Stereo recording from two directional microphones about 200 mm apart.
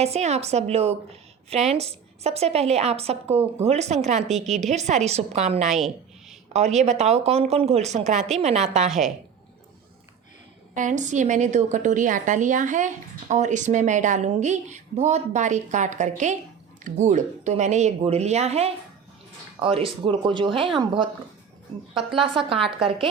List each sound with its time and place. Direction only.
0.0 s a woman's voice: 35° right (ahead or behind)
8.9 s a woman's voice: centre (ahead or behind)
10.8 s a woman's voice: 40° right (ahead or behind)